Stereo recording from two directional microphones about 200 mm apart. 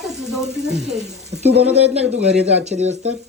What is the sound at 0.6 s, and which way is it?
Speech, 35° right (ahead or behind).